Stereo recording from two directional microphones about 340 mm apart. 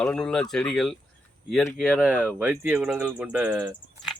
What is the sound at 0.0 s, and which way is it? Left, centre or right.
Speech, centre.